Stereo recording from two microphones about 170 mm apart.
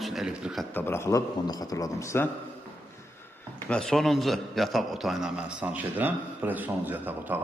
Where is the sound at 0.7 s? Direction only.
10° left (ahead or behind).